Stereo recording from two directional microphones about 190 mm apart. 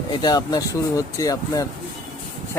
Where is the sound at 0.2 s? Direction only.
20° left (ahead or behind).